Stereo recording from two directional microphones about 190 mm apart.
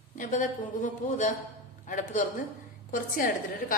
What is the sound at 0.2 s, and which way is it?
A woman's voice, 45° left (ahead or behind).